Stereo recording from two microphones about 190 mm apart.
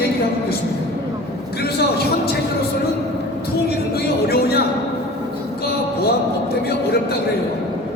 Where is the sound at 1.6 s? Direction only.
55° left (ahead or behind).